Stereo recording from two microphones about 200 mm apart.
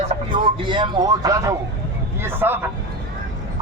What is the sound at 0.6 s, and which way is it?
A man's voice, 25° right (ahead or behind).